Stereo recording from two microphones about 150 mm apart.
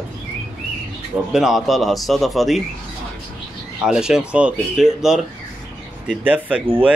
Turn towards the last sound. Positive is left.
turn(degrees=-10)  # may be behind; listen again after turning